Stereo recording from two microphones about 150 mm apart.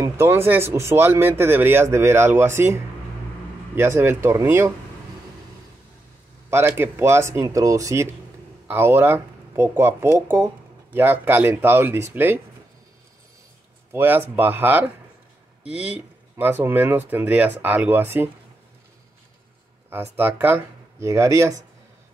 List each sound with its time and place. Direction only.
0.0 s speech: 20° right (ahead or behind)
6.5 s speech: 15° right (ahead or behind)
13.9 s speech: 15° right (ahead or behind)
19.9 s speech: 15° right (ahead or behind)